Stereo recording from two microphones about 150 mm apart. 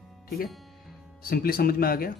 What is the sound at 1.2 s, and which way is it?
Speech, 80° left.